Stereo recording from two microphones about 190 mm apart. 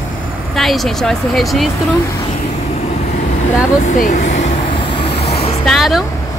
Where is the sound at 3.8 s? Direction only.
40° left (ahead or behind).